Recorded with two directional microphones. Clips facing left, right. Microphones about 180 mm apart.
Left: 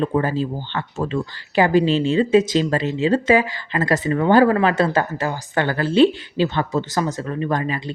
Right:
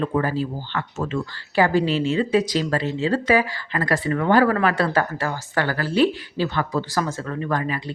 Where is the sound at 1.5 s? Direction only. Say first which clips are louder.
Left 3 dB; 20° left (ahead or behind).